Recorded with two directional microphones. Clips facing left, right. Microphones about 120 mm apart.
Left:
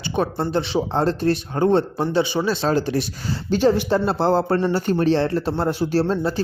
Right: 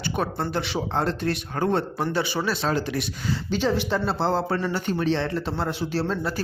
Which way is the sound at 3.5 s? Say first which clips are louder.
Left 7 dB; 50° left (ahead or behind).